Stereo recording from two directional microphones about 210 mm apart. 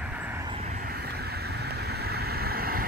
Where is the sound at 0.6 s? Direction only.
40° right (ahead or behind).